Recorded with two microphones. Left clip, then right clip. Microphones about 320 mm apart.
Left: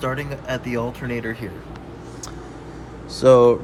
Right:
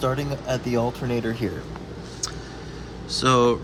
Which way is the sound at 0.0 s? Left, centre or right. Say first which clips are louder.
Right 1 dB; centre.